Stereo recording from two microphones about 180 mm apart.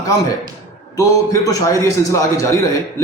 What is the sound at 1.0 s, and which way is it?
A man's voice, 20° left (ahead or behind).